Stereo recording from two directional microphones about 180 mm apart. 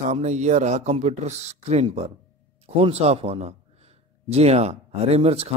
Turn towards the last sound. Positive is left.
turn(degrees=-35)  # may be behind; listen again after turning